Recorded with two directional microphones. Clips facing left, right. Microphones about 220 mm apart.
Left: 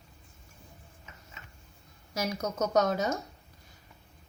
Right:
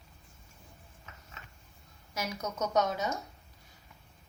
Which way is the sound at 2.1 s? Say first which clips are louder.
Left 4 dB; 40° left (ahead or behind).